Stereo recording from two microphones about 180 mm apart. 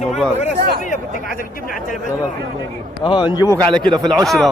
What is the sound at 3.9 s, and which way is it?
Speech, centre (ahead or behind).